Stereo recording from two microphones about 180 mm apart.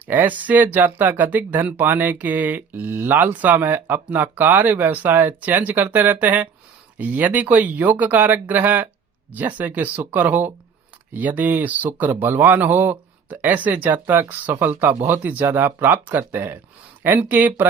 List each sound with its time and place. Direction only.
0.1 s speech: 10° right (ahead or behind)